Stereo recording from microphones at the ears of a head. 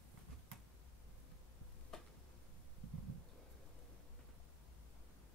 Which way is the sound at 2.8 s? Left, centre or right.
Right.